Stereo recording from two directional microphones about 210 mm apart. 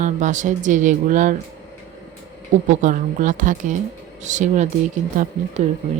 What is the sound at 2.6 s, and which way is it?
Speech, 35° right (ahead or behind).